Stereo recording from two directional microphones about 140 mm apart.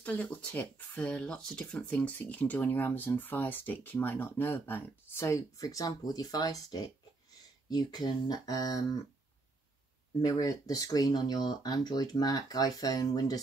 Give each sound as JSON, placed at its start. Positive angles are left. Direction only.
{"t": 0.0, "sound": "speech", "side_deg": 10}
{"t": 10.2, "sound": "speech", "side_deg": 25}